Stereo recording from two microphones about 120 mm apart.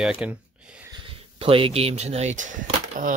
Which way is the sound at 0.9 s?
50° right (ahead or behind).